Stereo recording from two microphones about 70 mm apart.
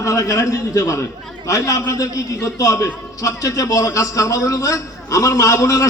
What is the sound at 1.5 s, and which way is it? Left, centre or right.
A man's voice, left.